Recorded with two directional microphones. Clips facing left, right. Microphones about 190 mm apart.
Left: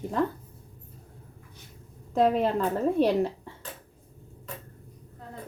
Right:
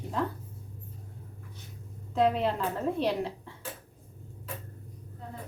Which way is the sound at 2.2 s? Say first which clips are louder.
Left 3 dB; 45° left (ahead or behind).